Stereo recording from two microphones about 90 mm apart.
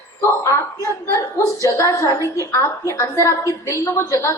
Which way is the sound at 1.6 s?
35° left (ahead or behind).